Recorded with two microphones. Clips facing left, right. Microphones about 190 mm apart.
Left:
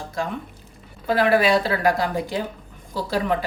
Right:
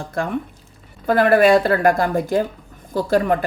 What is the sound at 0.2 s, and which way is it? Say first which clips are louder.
A woman's voice: right 5 dB; 55° right (ahead or behind).